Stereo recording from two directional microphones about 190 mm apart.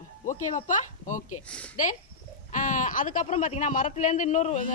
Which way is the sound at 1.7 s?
40° left (ahead or behind).